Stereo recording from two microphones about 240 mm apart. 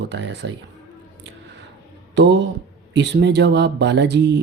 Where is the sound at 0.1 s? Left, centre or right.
Right.